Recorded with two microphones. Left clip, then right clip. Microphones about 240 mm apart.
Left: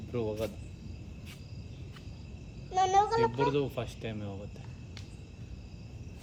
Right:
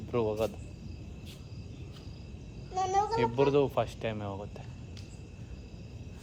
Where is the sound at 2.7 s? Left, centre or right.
Left.